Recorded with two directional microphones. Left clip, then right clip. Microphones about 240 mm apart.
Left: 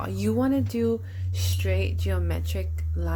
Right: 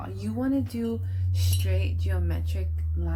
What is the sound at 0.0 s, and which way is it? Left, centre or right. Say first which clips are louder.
Speech: left 6 dB; left.